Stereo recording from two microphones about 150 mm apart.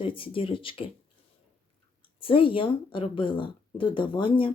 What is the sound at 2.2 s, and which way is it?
Speech, 35° left (ahead or behind).